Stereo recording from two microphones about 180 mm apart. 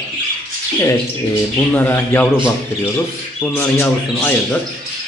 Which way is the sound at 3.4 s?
10° left (ahead or behind).